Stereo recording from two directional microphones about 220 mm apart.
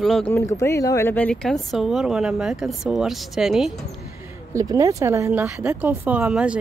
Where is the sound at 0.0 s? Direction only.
5° left (ahead or behind).